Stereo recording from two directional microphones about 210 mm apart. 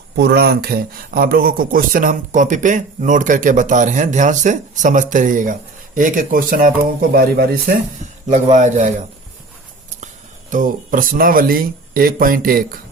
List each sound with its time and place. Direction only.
0.2 s speech: 50° right (ahead or behind)
8.3 s speech: 35° right (ahead or behind)
10.5 s speech: 40° right (ahead or behind)